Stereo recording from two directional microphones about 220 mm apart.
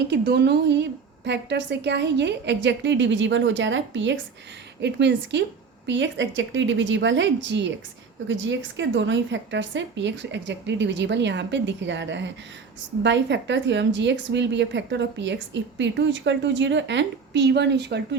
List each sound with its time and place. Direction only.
0.1 s a woman's voice: 50° right (ahead or behind)